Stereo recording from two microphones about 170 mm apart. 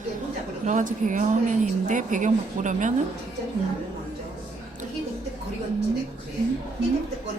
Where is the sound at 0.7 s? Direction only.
50° right (ahead or behind).